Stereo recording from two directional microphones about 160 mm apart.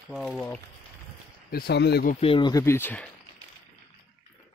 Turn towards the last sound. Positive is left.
turn(degrees=10)  # may be behind; listen again after turning